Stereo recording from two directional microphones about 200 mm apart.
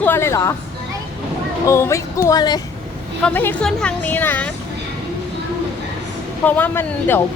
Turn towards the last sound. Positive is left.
turn(degrees=10)  # may be behind; listen again after turning